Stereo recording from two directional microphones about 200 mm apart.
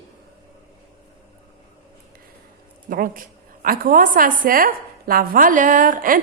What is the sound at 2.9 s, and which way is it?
A woman's voice, 45° right (ahead or behind).